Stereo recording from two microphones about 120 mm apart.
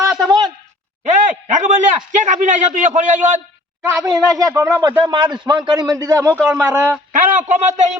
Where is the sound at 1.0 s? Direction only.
90° right.